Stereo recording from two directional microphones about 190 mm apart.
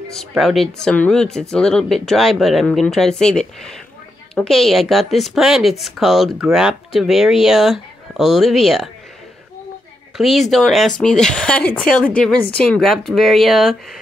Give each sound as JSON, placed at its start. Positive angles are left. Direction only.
{"t": 0.1, "sound": "speech", "side_deg": 0}
{"t": 10.1, "sound": "speech", "side_deg": 0}